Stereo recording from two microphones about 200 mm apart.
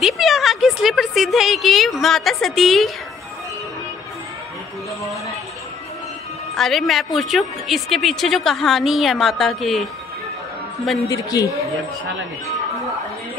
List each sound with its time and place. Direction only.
0.0 s a sound: centre (ahead or behind)
6.5 s a woman's voice: centre (ahead or behind)
11.1 s a man's voice: 20° left (ahead or behind)